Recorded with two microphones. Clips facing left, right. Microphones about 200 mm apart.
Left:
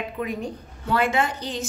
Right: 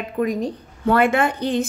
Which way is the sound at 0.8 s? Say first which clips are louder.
Right 5 dB; 55° right (ahead or behind).